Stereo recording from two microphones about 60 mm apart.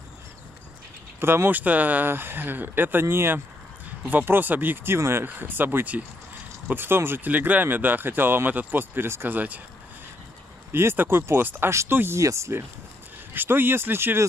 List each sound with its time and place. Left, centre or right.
1.2 s speech: right
4.9 s speech: right
5.2 s speech: right
9.3 s speech: right
10.7 s speech: right
12.2 s speech: right
13.3 s speech: right